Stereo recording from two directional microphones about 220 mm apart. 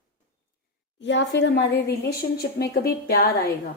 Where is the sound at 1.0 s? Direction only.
55° left (ahead or behind).